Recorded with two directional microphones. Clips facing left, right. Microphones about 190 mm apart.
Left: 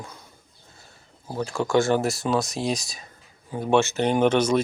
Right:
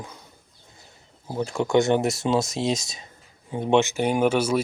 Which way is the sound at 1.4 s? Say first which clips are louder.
Right 1 dB; 20° right (ahead or behind).